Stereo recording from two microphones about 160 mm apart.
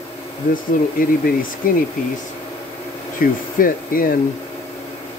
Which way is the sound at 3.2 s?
60° left (ahead or behind).